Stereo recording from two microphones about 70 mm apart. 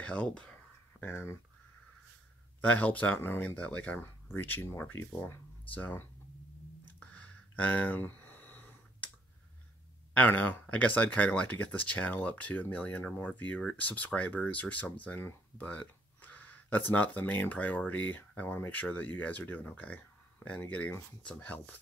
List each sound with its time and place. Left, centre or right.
0.0 s speech: centre
1.0 s speech: left
2.6 s speech: left
3.9 s speech: left
7.0 s a sound: left
10.1 s speech: left